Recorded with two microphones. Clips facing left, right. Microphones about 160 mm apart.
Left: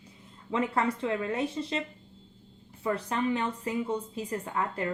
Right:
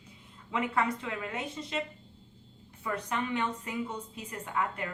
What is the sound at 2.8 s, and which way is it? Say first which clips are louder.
A woman's voice: left 5 dB; 30° left (ahead or behind).